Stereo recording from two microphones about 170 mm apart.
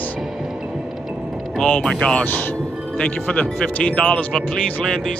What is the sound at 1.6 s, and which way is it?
Speech, 5° left (ahead or behind).